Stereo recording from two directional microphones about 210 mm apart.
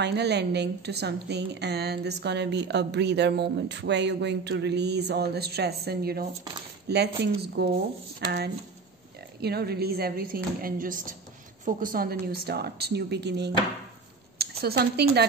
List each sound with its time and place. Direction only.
0.0 s a woman's voice: 55° right (ahead or behind)
9.4 s a woman's voice: 50° right (ahead or behind)